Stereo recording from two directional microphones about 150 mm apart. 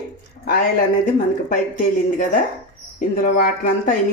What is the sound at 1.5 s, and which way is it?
Speech, 65° left (ahead or behind).